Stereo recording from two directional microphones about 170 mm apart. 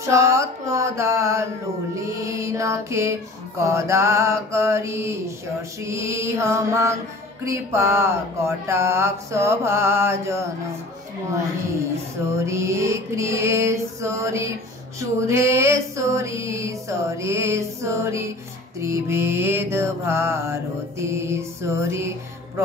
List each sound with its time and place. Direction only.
0.0 s mantra: 15° right (ahead or behind)
2.0 s female singing: 20° right (ahead or behind)
12.4 s female singing: 15° right (ahead or behind)